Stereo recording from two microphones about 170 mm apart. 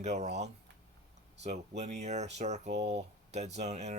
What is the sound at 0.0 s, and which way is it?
Speech, 40° right (ahead or behind).